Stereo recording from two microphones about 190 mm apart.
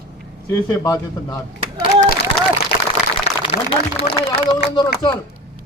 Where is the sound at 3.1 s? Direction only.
30° left (ahead or behind).